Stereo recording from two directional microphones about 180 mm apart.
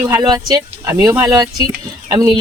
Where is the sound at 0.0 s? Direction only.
15° right (ahead or behind).